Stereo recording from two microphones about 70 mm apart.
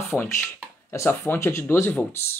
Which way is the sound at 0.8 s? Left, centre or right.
Left.